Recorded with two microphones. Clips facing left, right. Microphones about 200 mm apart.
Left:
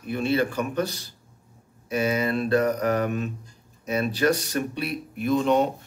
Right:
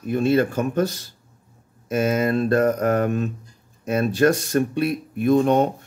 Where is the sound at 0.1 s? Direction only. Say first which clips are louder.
Right 5 dB; 45° right (ahead or behind).